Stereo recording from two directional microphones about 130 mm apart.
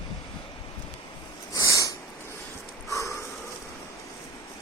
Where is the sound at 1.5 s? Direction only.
25° left (ahead or behind).